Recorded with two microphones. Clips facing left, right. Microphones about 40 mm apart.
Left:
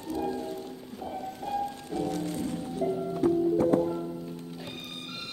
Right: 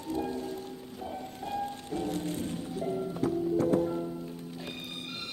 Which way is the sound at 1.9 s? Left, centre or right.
Right.